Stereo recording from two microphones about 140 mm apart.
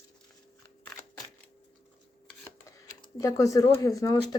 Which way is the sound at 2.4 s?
20° left (ahead or behind).